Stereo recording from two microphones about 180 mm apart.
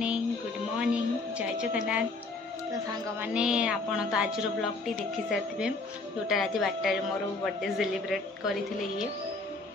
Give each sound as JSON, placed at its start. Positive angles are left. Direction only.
{"t": 0.7, "sound": "music", "side_deg": -5}
{"t": 3.2, "sound": "a woman's voice", "side_deg": -5}